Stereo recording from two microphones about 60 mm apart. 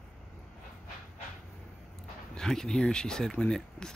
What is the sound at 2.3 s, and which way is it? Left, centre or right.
Speech, centre.